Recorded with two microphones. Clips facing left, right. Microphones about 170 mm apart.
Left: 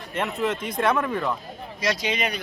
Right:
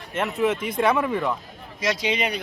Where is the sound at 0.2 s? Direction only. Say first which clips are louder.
Right 3 dB; 10° right (ahead or behind).